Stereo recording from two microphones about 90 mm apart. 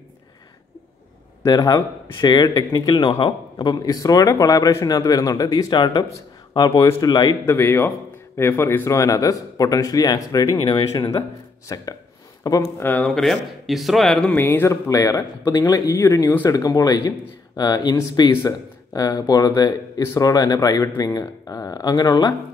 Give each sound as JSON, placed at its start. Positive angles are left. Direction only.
{"t": 1.4, "sound": "speech", "side_deg": 45}
{"t": 3.1, "sound": "speech", "side_deg": 65}
{"t": 7.4, "sound": "speech", "side_deg": 30}
{"t": 12.7, "sound": "speech", "side_deg": 25}
{"t": 13.0, "sound": "speech", "side_deg": 5}
{"t": 14.3, "sound": "speech", "side_deg": 25}